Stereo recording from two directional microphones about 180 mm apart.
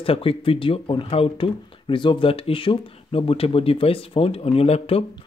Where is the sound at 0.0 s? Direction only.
30° left (ahead or behind).